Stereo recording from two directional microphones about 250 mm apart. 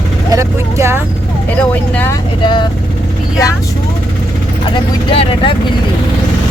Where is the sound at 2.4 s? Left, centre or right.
Centre.